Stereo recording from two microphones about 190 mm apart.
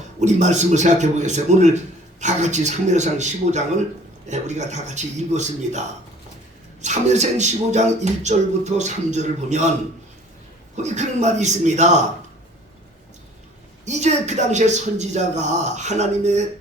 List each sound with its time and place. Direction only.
0.2 s speech: 40° right (ahead or behind)
6.8 s speech: 35° right (ahead or behind)
10.8 s speech: 40° right (ahead or behind)
13.8 s speech: 35° right (ahead or behind)